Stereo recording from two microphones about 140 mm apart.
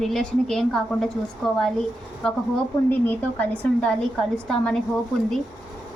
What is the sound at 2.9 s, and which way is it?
Speech, 10° left (ahead or behind).